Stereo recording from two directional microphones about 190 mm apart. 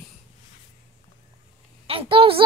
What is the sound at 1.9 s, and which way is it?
Speech, 30° right (ahead or behind).